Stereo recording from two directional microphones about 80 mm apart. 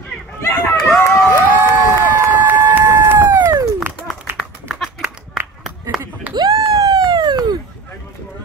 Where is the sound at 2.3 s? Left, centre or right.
Right.